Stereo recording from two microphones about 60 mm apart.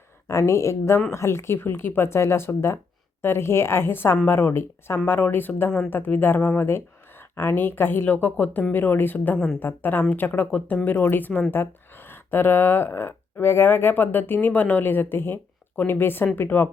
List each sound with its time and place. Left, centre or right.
0.3 s speech: left